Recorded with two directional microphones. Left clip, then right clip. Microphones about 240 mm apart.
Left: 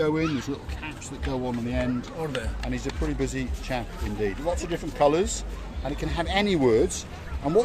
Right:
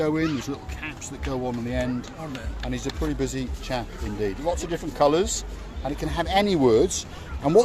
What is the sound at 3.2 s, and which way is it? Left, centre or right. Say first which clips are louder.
Speech: right 1 dB; centre.